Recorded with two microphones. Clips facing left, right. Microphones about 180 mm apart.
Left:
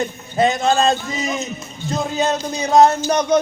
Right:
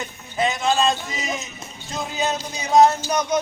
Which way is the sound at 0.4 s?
45° left (ahead or behind).